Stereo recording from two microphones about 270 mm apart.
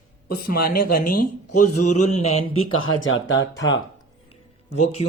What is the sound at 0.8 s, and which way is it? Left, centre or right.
Speech, left.